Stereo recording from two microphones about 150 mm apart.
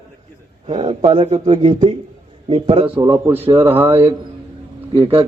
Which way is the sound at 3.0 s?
20° right (ahead or behind).